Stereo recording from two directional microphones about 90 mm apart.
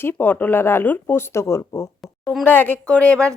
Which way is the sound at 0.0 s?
25° left (ahead or behind).